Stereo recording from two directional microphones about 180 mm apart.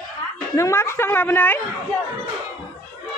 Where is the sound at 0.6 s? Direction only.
15° left (ahead or behind).